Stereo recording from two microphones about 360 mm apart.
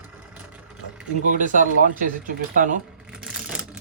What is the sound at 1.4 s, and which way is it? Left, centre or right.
Speech, right.